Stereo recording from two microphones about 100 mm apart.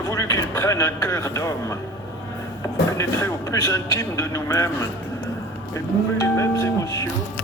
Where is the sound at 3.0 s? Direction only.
30° left (ahead or behind).